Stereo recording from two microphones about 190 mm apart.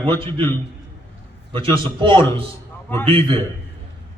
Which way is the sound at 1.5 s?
25° right (ahead or behind).